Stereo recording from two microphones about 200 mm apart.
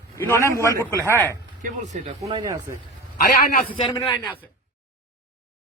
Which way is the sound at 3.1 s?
45° left (ahead or behind).